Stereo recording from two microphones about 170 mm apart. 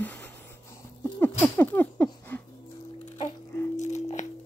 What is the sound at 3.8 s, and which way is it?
Music, 45° left (ahead or behind).